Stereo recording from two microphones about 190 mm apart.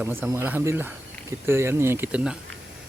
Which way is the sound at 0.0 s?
10° right (ahead or behind).